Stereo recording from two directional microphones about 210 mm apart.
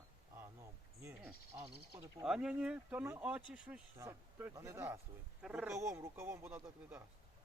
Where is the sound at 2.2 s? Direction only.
Centre (ahead or behind).